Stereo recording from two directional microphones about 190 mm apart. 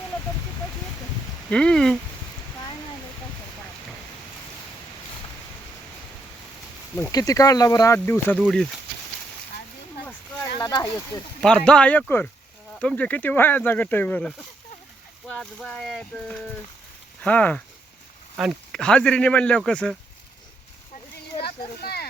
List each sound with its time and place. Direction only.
1.5 s speech: 5° left (ahead or behind)
6.9 s speech: 15° left (ahead or behind)
10.6 s speech: 20° left (ahead or behind)
11.4 s speech: 5° left (ahead or behind)
21.4 s a sound: 55° left (ahead or behind)